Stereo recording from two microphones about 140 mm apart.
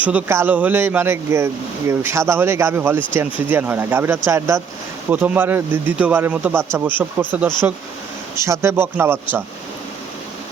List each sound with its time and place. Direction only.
0.0 s speech: 10° right (ahead or behind)